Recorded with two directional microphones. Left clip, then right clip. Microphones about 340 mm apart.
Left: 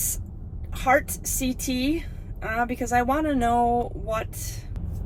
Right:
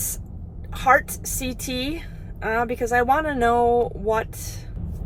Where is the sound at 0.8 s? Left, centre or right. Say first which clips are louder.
Right 3 dB; centre.